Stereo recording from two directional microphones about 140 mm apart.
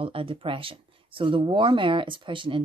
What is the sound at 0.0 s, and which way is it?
Speech, 40° right (ahead or behind).